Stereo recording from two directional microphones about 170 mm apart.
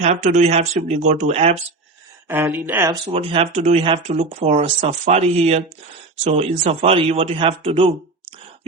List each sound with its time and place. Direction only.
0.0 s speech: 45° right (ahead or behind)
2.2 s speech: 10° right (ahead or behind)
3.1 s speech: 35° right (ahead or behind)